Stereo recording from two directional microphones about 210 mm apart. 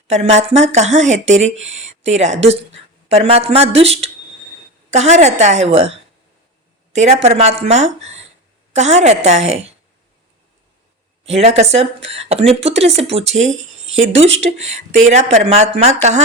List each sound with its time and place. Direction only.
0.1 s speech: 30° right (ahead or behind)
4.9 s speech: 30° right (ahead or behind)
11.3 s speech: 30° right (ahead or behind)